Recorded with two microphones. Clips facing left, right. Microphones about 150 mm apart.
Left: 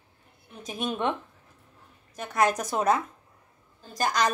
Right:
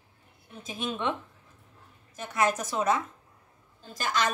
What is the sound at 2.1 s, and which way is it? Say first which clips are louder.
A woman's voice: left 2 dB; 40° left (ahead or behind).